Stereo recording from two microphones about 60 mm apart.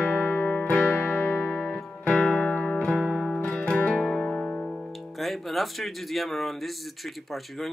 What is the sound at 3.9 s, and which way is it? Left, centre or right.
Music, centre.